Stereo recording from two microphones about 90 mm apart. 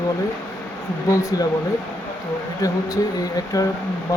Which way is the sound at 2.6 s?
40° left (ahead or behind).